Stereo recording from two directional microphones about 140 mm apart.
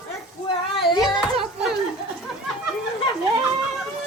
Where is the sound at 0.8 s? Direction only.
35° left (ahead or behind).